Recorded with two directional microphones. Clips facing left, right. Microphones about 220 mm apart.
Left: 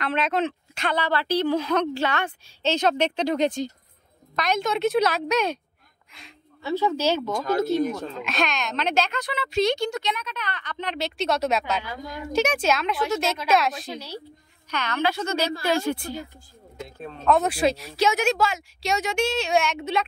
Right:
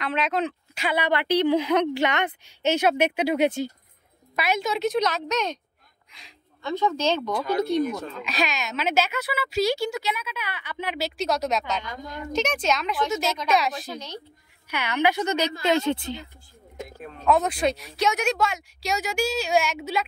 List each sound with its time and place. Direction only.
0.0 s a woman's voice: centre (ahead or behind)
14.7 s a woman's voice: 10° right (ahead or behind)
17.3 s speech: 5° left (ahead or behind)